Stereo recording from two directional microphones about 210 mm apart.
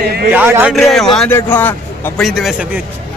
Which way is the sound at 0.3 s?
10° right (ahead or behind).